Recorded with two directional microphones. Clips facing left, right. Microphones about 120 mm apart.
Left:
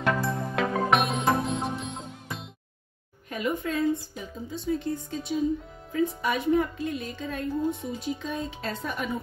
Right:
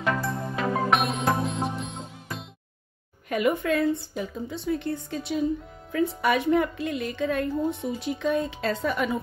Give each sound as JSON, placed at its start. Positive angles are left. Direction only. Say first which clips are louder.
{"t": 0.0, "sound": "music", "louder": "left 1 dB", "side_deg": 0}
{"t": 3.3, "sound": "a woman's voice", "louder": "right 5 dB", "side_deg": -80}
{"t": 8.2, "sound": "speech", "louder": "right 7 dB", "side_deg": -85}